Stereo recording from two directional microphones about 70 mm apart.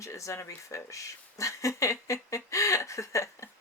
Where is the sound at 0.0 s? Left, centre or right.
Left.